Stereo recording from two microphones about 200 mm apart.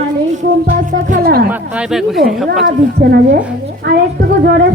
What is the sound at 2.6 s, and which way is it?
A woman's voice, 55° right (ahead or behind).